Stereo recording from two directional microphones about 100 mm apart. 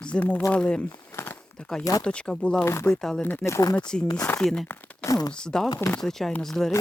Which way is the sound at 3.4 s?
30° left (ahead or behind).